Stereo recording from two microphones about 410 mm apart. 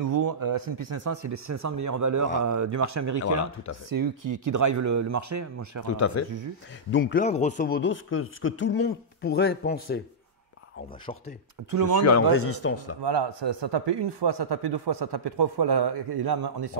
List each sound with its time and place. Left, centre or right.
0.0 s speech: right
5.9 s speech: left
6.9 s speech: left
11.1 s speech: centre
12.0 s speech: left
13.0 s speech: right